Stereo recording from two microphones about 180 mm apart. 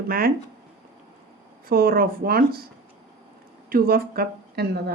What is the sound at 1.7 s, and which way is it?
Speech, 55° right (ahead or behind).